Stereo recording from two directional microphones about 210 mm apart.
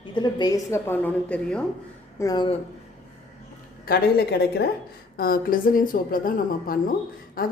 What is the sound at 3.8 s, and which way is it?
A woman's voice, 45° left (ahead or behind).